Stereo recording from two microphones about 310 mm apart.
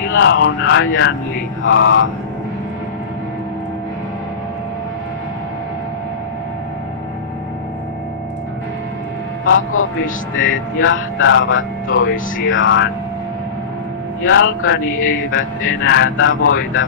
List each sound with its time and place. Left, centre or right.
0.1 s speech: left
9.4 s a man's voice: left
14.3 s speech: left
14.9 s speech: left
15.3 s speech: left